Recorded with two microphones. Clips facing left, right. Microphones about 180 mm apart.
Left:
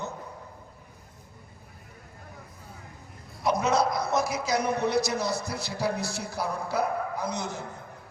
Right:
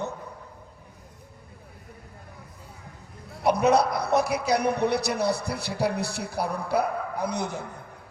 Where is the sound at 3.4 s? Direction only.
60° right (ahead or behind).